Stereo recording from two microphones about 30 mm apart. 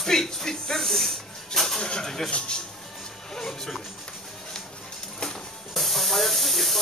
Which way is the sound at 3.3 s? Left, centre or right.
Centre.